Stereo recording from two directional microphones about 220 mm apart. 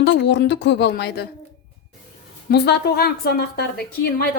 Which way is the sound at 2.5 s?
50° left (ahead or behind).